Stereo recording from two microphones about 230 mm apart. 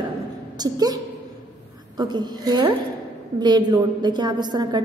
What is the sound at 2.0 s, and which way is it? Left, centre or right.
A woman's voice, centre.